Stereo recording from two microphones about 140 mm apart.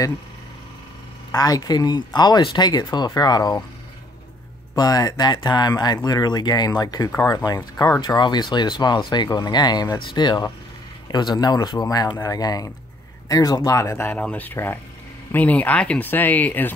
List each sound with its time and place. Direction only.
1.3 s speech: 25° left (ahead or behind)
4.7 s speech: 30° left (ahead or behind); by 16.7 s 10° left (ahead or behind)